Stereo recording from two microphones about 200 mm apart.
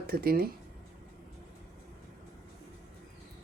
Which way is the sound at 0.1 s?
50° right (ahead or behind).